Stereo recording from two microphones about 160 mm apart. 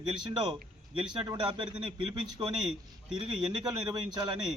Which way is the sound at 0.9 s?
30° right (ahead or behind).